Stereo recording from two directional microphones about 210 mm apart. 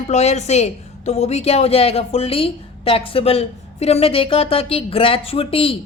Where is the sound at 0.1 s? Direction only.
30° left (ahead or behind).